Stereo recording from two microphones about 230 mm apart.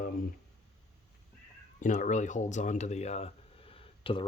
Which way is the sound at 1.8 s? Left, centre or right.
Left.